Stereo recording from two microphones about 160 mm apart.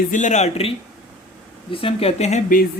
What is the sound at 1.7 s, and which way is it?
Speech, 35° left (ahead or behind).